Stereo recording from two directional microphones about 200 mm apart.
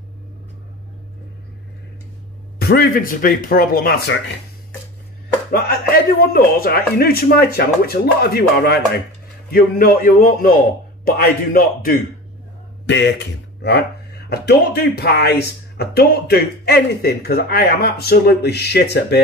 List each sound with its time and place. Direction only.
2.6 s speech: 50° left (ahead or behind)
5.5 s speech: 50° left (ahead or behind)
12.8 s speech: 60° left (ahead or behind)